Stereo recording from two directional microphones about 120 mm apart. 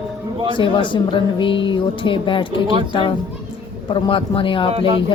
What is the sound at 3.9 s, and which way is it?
Speech, 45° left (ahead or behind).